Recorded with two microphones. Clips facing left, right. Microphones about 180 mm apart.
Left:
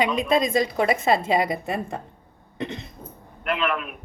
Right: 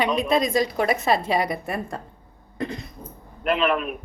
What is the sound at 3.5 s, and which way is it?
Speech, 35° right (ahead or behind).